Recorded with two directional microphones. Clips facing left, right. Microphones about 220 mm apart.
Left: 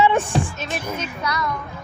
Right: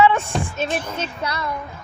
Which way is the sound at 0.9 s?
30° right (ahead or behind).